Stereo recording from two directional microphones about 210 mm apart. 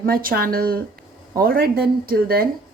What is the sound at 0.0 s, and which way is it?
Speech, 40° right (ahead or behind).